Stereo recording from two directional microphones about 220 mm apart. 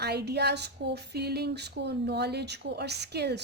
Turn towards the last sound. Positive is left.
turn(degrees=-50)  # may be behind; listen again after turning